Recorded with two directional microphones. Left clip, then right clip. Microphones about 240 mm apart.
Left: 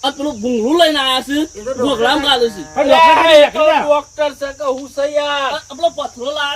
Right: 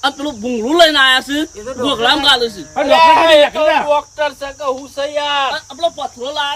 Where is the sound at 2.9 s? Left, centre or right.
Right.